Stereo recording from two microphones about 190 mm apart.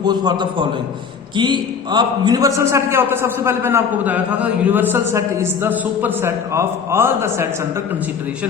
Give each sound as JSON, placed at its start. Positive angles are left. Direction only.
{"t": 0.0, "sound": "a man's voice", "side_deg": -20}